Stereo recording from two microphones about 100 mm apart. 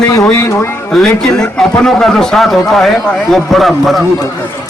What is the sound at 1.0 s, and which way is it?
A man's voice, 5° left (ahead or behind).